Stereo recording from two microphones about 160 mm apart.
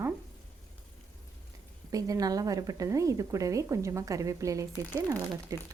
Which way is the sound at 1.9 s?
20° right (ahead or behind).